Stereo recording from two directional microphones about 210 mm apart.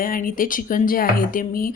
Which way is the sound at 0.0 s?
40° left (ahead or behind).